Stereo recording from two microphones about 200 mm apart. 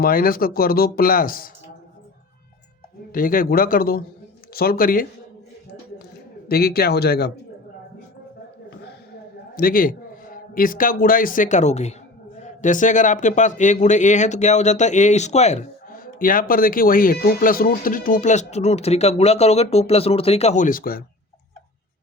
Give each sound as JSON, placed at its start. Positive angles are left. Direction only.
{"t": 0.0, "sound": "speech", "side_deg": 45}
{"t": 3.1, "sound": "speech", "side_deg": 45}
{"t": 6.5, "sound": "speech", "side_deg": 50}
{"t": 9.6, "sound": "a man's voice", "side_deg": 45}